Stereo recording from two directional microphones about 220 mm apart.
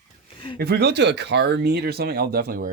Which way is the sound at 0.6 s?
45° right (ahead or behind).